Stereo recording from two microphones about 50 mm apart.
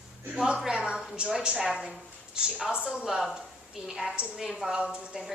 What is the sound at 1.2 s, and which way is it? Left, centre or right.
Speech, centre.